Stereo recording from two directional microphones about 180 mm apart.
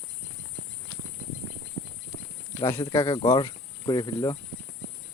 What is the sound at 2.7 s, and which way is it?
Speech, 25° left (ahead or behind).